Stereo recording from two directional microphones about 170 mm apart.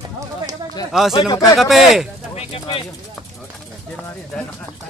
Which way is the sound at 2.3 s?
35° left (ahead or behind).